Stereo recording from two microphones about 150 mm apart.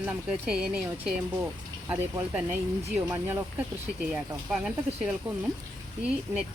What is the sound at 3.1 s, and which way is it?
Speech, 15° right (ahead or behind).